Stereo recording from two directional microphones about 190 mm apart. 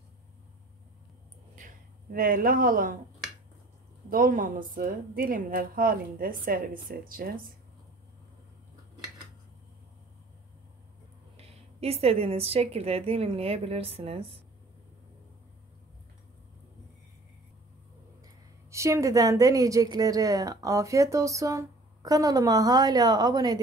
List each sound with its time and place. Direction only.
1.5 s a sound: 45° right (ahead or behind)
4.1 s a woman's voice: 45° right (ahead or behind)
11.3 s a woman's voice: 30° right (ahead or behind)
18.2 s speech: 15° right (ahead or behind)